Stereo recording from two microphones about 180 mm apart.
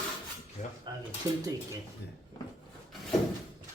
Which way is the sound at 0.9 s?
25° right (ahead or behind).